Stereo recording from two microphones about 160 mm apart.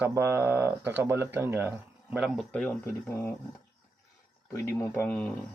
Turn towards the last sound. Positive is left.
turn(degrees=10)  # may be behind; listen again after turning